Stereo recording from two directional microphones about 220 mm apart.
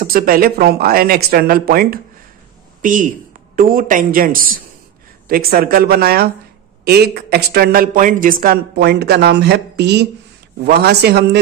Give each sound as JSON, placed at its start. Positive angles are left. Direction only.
{"t": 0.0, "sound": "a woman's voice", "side_deg": -40}